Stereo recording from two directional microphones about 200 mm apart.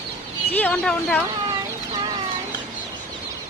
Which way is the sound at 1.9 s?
20° right (ahead or behind).